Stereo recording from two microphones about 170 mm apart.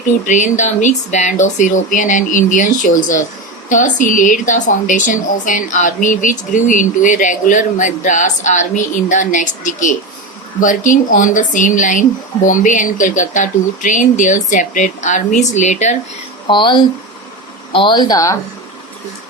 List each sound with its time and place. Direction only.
0.3 s speech: 45° left (ahead or behind)
16.5 s speech: 25° left (ahead or behind)